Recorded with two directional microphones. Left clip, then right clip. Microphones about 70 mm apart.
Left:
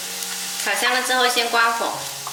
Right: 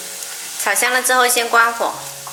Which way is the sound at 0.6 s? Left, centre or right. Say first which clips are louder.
Right 4 dB; right.